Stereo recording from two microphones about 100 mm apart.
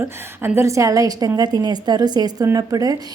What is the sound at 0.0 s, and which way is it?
A woman's voice, 25° right (ahead or behind).